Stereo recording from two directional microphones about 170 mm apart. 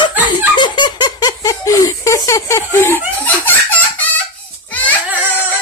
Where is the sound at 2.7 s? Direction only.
15° left (ahead or behind).